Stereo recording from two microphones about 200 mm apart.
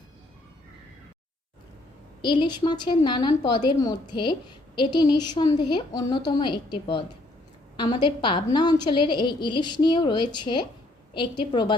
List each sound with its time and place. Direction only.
2.2 s speech: 25° left (ahead or behind)